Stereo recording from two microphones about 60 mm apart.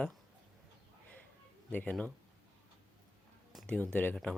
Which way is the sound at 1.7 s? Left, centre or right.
Left.